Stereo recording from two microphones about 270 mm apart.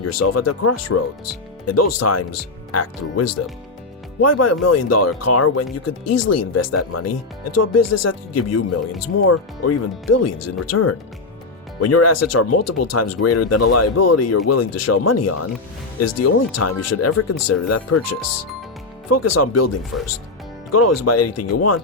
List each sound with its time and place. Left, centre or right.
0.0 s speech: left